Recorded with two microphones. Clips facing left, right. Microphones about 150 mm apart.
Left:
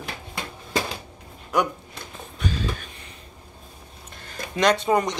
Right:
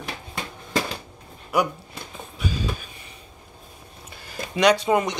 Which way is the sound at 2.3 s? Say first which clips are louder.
Even; 10° right (ahead or behind).